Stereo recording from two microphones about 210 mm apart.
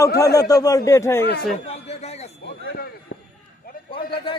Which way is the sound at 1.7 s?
30° left (ahead or behind).